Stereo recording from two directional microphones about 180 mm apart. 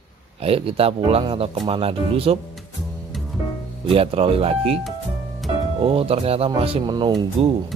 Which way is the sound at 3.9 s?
30° right (ahead or behind).